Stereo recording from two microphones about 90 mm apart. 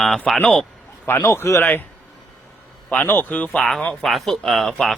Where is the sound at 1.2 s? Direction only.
35° left (ahead or behind).